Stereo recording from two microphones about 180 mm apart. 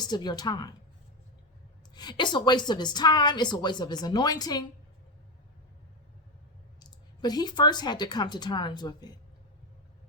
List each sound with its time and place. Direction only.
0.0 s a woman's voice: 25° left (ahead or behind)
2.0 s a woman's voice: 25° left (ahead or behind)
6.7 s speech: 20° left (ahead or behind)